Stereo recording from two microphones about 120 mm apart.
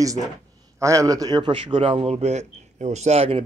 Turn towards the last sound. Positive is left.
turn(degrees=-55)  # may be behind; listen again after turning